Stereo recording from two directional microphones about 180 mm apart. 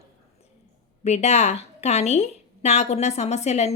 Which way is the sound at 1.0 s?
35° left (ahead or behind).